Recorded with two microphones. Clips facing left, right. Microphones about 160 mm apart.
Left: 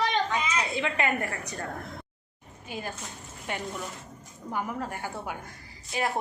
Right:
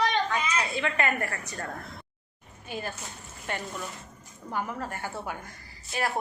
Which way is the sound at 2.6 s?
15° left (ahead or behind).